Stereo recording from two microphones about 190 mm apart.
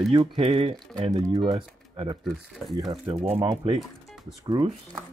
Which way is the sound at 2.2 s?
Centre (ahead or behind).